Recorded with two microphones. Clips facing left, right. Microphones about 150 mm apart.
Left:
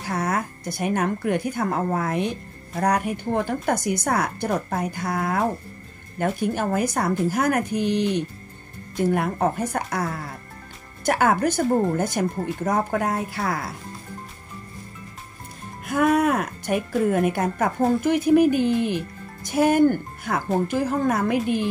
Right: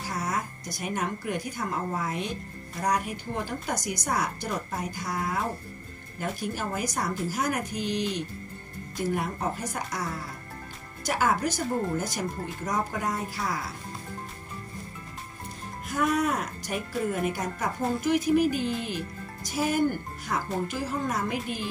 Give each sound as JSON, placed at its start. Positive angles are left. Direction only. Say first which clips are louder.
{"t": 0.1, "sound": "a woman's voice", "louder": "left 7 dB", "side_deg": 60}
{"t": 15.9, "sound": "a woman's voice", "louder": "left 7 dB", "side_deg": 60}